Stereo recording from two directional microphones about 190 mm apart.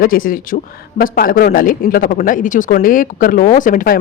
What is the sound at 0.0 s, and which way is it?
A woman's voice, 50° left (ahead or behind).